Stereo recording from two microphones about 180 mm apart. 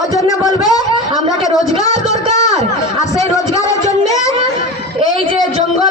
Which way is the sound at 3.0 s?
20° left (ahead or behind).